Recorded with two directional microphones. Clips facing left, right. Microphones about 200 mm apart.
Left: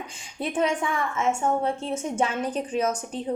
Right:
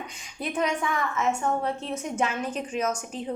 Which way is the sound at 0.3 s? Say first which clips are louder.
Left 2 dB; 30° left (ahead or behind).